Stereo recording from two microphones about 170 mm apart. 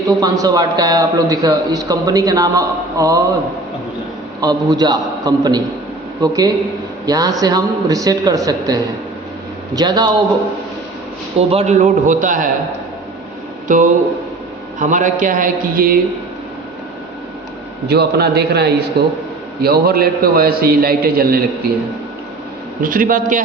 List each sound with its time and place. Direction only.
0.2 s a man's voice: 20° right (ahead or behind)
4.4 s a man's voice: 25° right (ahead or behind)
11.3 s a man's voice: 40° right (ahead or behind)
13.7 s a man's voice: 50° right (ahead or behind)
17.8 s a man's voice: 75° right (ahead or behind)
19.6 s a man's voice: 65° right (ahead or behind)
22.8 s a man's voice: 55° right (ahead or behind)